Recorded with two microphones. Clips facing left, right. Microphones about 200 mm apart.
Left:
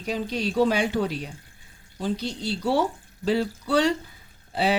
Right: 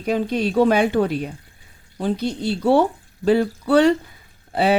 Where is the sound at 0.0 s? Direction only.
55° right (ahead or behind).